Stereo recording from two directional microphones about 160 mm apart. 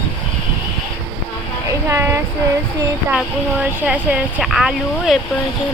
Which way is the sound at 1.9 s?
15° right (ahead or behind).